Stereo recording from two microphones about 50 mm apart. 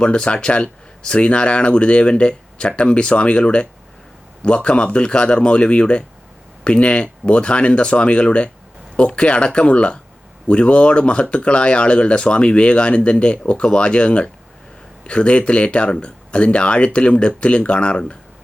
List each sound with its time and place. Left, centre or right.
0.0 s speech: left